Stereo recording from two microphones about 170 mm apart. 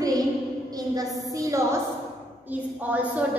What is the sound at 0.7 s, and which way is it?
A woman's voice, 20° right (ahead or behind).